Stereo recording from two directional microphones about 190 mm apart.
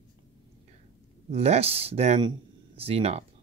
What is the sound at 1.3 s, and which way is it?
Speech, 30° right (ahead or behind).